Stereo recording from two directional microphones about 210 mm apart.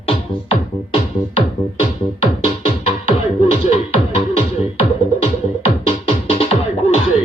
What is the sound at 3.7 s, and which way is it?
Music, 25° left (ahead or behind).